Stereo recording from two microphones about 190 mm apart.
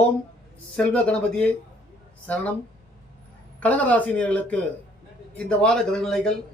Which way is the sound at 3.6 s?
5° left (ahead or behind).